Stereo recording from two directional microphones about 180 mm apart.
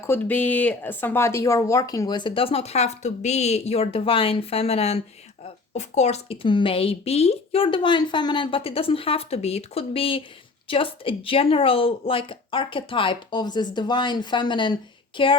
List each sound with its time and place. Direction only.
0.0 s a woman's voice: 10° left (ahead or behind); by 15.4 s 30° left (ahead or behind)